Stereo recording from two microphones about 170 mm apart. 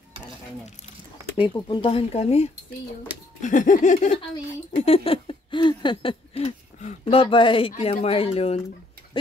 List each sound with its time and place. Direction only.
1.3 s speech: 30° left (ahead or behind)
3.4 s laughter: 50° left (ahead or behind)
4.7 s a sound: 35° left (ahead or behind)
9.1 s tick-tock: 30° left (ahead or behind)